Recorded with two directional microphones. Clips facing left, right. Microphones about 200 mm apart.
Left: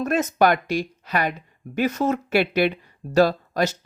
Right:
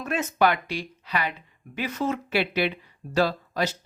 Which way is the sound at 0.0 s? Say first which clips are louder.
Left 4 dB; 40° left (ahead or behind).